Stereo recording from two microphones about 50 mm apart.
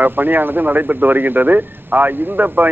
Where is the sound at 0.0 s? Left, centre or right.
Right.